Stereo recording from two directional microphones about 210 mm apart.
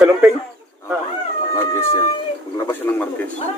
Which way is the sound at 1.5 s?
15° left (ahead or behind).